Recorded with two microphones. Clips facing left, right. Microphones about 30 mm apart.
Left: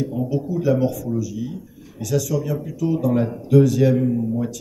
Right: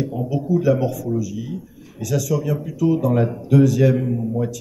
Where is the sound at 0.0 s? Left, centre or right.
Right.